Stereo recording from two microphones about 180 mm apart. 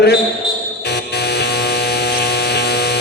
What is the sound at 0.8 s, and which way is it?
Music, 65° left (ahead or behind).